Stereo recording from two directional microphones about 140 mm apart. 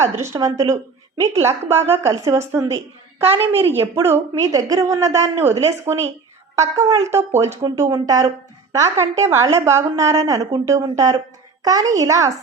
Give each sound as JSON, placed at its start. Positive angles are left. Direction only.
{"t": 0.0, "sound": "a woman's voice", "side_deg": -20}